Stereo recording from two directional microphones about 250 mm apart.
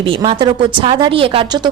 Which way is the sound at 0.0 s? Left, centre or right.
Centre.